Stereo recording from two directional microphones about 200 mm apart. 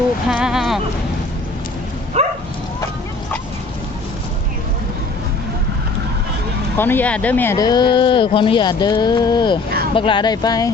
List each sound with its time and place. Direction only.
0.3 s a sound: 5° right (ahead or behind)
2.2 s dog: 30° right (ahead or behind)
6.7 s speech: 10° left (ahead or behind)